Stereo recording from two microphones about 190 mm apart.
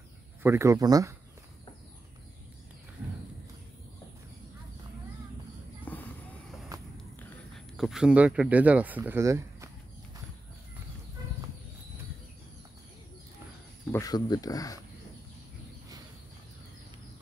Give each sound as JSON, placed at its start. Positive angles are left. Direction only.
{"t": 0.4, "sound": "speech", "side_deg": -15}
{"t": 5.9, "sound": "a sound", "side_deg": 5}
{"t": 7.2, "sound": "speech", "side_deg": 5}
{"t": 13.9, "sound": "speech", "side_deg": 20}